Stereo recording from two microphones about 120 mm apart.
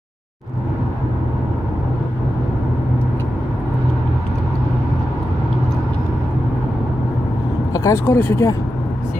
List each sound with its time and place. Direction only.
7.7 s speech: 25° left (ahead or behind)